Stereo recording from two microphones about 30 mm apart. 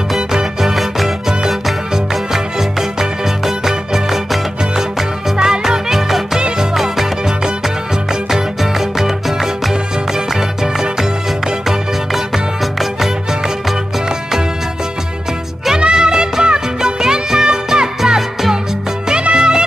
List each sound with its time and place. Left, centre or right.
0.7 s music: centre
2.3 s music: centre
5.4 s music: right
5.9 s music: centre
8.1 s music: right
15.8 s music: right
19.3 s music: right